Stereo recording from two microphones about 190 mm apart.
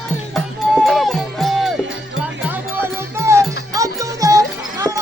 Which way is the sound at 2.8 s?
15° right (ahead or behind).